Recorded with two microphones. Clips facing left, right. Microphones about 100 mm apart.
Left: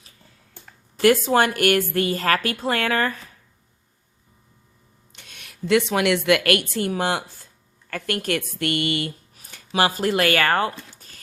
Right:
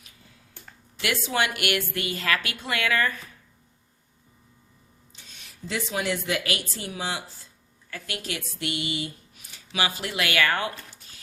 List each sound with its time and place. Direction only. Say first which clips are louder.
0.9 s a woman's voice: left 10 dB; 45° left (ahead or behind)
5.1 s a woman's voice: left 4 dB; 60° left (ahead or behind)
9.5 s speech: left 7 dB; 45° left (ahead or behind)